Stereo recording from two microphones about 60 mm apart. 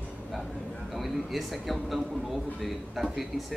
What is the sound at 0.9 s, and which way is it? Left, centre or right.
A man's voice, centre.